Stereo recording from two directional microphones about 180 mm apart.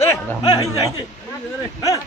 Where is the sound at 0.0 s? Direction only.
20° left (ahead or behind).